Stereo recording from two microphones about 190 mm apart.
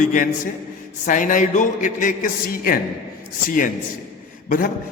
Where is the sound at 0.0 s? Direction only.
45° left (ahead or behind).